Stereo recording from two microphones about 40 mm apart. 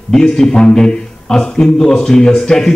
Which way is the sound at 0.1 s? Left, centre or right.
Centre.